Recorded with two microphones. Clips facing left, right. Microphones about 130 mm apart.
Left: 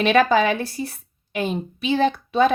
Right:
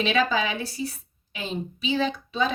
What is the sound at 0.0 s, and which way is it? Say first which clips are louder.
A woman's voice: left 7 dB; 55° left (ahead or behind).